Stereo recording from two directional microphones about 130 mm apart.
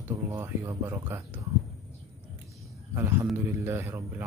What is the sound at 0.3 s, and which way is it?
Speech, 20° right (ahead or behind).